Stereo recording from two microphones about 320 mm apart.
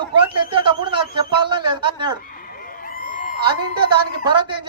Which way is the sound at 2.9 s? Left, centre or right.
Left.